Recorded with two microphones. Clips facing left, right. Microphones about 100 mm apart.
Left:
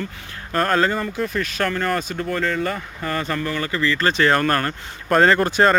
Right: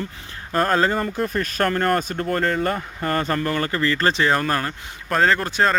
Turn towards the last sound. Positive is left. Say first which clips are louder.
# left 3 dB
turn(degrees=0)  # may be behind; listen again after turning